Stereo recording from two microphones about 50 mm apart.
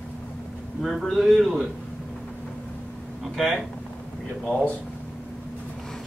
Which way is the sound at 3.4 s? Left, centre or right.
Centre.